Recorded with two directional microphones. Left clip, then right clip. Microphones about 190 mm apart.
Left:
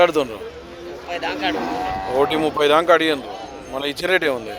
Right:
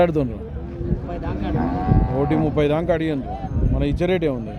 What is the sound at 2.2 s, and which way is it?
Speech, 5° left (ahead or behind).